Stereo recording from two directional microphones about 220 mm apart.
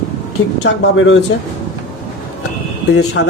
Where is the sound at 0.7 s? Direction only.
60° left (ahead or behind).